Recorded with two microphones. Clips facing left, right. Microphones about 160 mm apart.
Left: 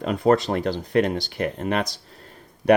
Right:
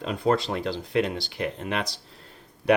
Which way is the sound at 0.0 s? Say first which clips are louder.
Left 5 dB; 50° left (ahead or behind).